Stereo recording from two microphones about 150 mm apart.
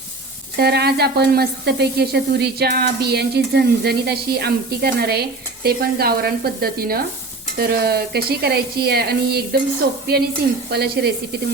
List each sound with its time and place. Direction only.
0.5 s speech: 90° right